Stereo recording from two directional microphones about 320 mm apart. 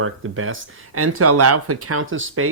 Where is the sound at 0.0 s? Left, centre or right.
Right.